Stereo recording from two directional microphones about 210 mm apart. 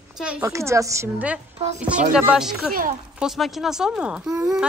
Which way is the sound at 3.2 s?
Centre (ahead or behind).